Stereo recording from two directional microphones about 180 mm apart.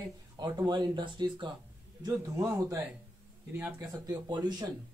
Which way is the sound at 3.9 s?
20° right (ahead or behind).